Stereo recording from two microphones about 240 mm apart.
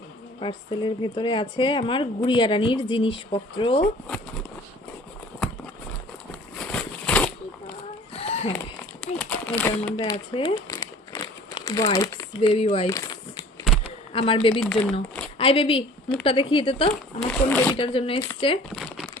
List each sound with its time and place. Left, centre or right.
0.3 s speech: left
6.6 s a sound: centre
8.1 s a sound: left
8.5 s a sound: centre
10.0 s speech: centre
14.1 s speech: left
16.9 s speech: centre
17.7 s speech: left
18.7 s crumpling: centre